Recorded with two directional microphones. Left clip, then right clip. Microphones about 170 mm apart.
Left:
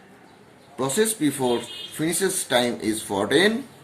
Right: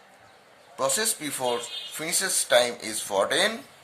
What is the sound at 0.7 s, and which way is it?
Speech, 50° right (ahead or behind).